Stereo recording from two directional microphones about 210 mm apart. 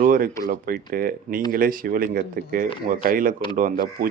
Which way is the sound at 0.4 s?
40° right (ahead or behind).